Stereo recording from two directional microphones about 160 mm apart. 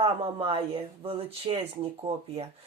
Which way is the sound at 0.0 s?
35° right (ahead or behind).